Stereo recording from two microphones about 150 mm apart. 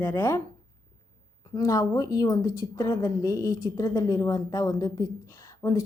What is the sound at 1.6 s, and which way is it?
A woman's voice, 20° left (ahead or behind).